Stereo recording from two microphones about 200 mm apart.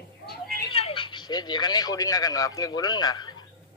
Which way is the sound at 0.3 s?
50° left (ahead or behind).